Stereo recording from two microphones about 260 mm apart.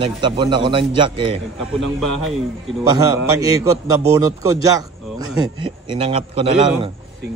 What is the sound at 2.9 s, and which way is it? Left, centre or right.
A man's voice, centre.